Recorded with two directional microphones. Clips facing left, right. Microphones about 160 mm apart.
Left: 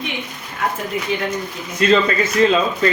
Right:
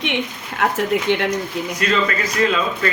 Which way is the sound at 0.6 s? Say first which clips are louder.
Right 4 dB; 75° right (ahead or behind).